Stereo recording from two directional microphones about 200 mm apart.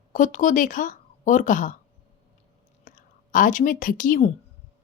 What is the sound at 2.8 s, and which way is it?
Speech, 45° left (ahead or behind).